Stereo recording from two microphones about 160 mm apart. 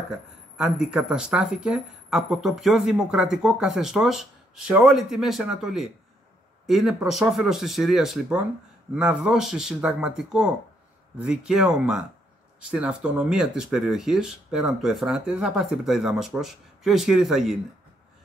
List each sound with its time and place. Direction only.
0.6 s speech: 5° right (ahead or behind)